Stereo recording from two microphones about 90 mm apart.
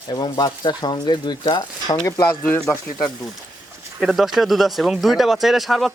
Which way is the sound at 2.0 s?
45° left (ahead or behind).